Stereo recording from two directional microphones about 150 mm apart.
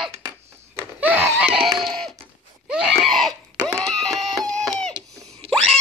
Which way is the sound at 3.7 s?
5° left (ahead or behind).